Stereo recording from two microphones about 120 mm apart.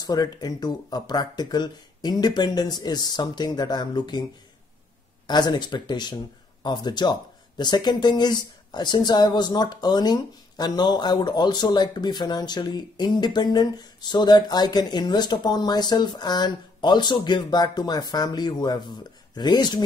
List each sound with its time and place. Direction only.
0.0 s speech: 30° left (ahead or behind)
5.2 s speech: 35° left (ahead or behind)